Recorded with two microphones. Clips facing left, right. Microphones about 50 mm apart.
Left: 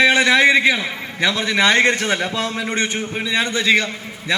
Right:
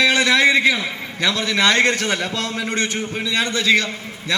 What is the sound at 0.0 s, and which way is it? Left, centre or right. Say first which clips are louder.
A man's voice: left 2 dB; centre.